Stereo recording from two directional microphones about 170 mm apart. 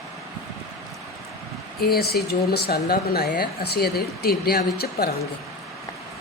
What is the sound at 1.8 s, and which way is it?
Speech, 65° left (ahead or behind).